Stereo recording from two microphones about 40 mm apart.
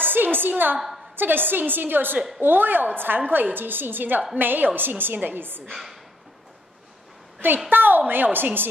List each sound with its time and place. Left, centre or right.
0.0 s a woman's voice: right
0.7 s speech: centre
1.1 s a woman's voice: right
5.7 s speech: centre
7.7 s a woman's voice: right